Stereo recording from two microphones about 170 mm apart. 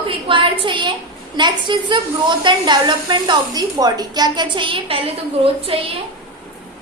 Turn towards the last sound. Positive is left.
turn(degrees=-35)  # may be behind; listen again after turning